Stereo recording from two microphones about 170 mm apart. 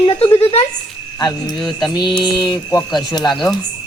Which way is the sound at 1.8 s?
25° left (ahead or behind).